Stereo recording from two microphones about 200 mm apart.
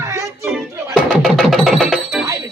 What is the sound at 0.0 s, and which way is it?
Music, 15° right (ahead or behind).